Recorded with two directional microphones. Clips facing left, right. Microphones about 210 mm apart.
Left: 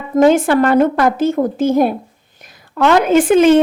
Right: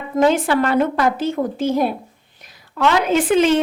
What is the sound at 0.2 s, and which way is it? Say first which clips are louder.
A woman's voice: left 5 dB; 50° left (ahead or behind).